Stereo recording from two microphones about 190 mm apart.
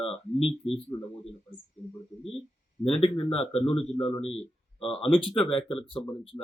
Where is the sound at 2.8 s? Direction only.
30° left (ahead or behind).